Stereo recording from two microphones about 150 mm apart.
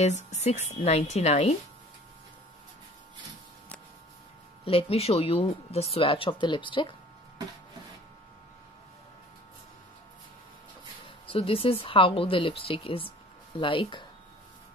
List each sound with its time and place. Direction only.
0.0 s a woman's voice: 50° left (ahead or behind)
4.6 s speech: 40° left (ahead or behind)
11.2 s speech: 40° left (ahead or behind)